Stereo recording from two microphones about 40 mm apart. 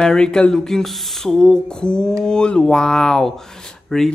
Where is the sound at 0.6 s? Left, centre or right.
Centre.